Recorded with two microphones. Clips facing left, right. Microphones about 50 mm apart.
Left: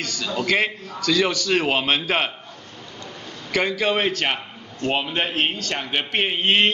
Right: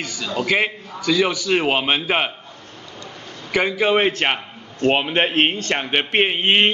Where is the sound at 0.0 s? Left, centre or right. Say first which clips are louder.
Right 1 dB; centre.